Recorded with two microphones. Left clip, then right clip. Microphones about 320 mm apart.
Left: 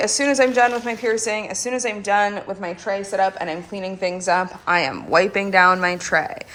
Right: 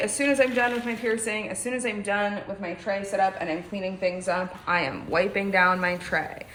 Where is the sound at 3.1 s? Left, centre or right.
Left.